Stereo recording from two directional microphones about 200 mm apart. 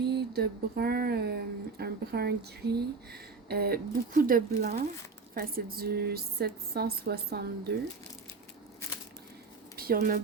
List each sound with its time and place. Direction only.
0.0 s speech: 55° right (ahead or behind)
9.7 s speech: 45° right (ahead or behind)